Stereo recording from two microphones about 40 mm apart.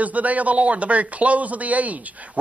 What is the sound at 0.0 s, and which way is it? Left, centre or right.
Speech, right.